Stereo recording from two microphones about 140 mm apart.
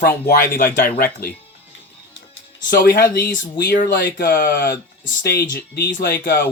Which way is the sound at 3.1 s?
80° left.